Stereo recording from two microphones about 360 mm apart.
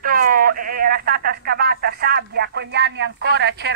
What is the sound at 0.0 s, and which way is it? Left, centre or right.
Speech, right.